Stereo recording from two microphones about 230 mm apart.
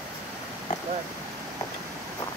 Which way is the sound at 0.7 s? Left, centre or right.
Left.